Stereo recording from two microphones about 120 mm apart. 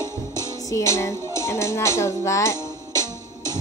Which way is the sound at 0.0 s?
25° left (ahead or behind).